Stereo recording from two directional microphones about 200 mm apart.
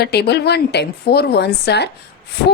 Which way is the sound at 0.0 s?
55° left (ahead or behind).